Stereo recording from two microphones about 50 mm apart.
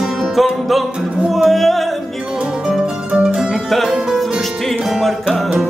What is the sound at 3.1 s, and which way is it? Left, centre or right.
Music, right.